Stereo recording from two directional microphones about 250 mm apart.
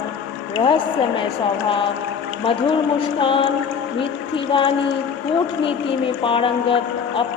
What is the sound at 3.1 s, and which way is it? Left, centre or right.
Speech, centre.